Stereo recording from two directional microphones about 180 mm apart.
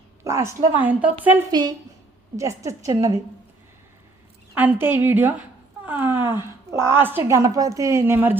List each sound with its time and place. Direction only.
0.3 s a woman's voice: 15° right (ahead or behind)
1.5 s a woman's voice: 25° right (ahead or behind)
4.5 s a woman's voice: 10° right (ahead or behind)
5.8 s a sound: 10° right (ahead or behind)
6.7 s a woman's voice: 15° right (ahead or behind)